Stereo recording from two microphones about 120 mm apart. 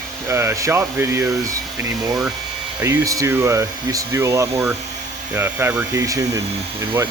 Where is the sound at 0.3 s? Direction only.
20° right (ahead or behind).